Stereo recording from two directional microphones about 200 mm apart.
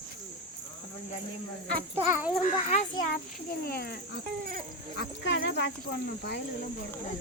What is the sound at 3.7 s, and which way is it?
Speech, 50° left (ahead or behind).